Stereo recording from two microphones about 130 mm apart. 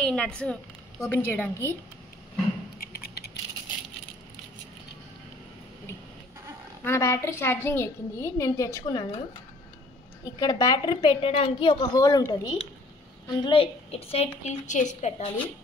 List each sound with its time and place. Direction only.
0.0 s a woman's voice: 5° left (ahead or behind)
6.8 s a woman's voice: 20° left (ahead or behind)
10.2 s a woman's voice: 30° left (ahead or behind)
13.3 s a woman's voice: 35° left (ahead or behind)
14.4 s a woman's voice: 65° left (ahead or behind)